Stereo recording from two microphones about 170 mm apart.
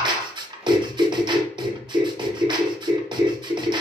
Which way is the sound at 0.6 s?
25° right (ahead or behind).